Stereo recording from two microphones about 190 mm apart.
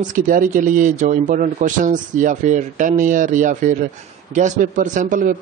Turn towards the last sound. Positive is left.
turn(degrees=-45)  # may be behind; listen again after turning